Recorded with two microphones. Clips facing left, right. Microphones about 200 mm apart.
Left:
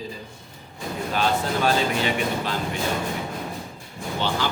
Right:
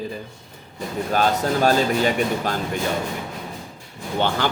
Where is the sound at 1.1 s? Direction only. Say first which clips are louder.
Right 3 dB; 45° right (ahead or behind).